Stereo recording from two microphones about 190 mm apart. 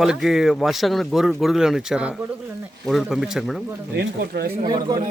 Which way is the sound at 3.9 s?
60° right (ahead or behind).